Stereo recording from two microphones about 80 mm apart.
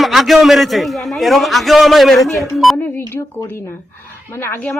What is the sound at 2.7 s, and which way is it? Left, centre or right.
A woman's voice, left.